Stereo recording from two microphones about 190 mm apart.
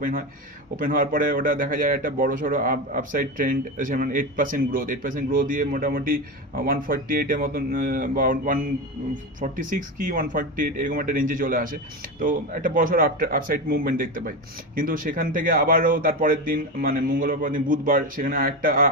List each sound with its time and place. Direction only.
0.0 s speech: 50° right (ahead or behind)